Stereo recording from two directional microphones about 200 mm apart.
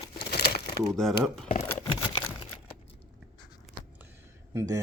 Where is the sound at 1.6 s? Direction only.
15° left (ahead or behind).